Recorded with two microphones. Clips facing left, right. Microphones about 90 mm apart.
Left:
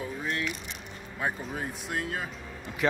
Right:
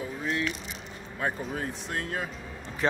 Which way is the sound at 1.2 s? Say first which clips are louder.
Right 1 dB; 10° left (ahead or behind).